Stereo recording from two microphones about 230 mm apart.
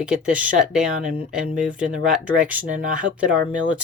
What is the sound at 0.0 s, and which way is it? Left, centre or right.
Speech, centre.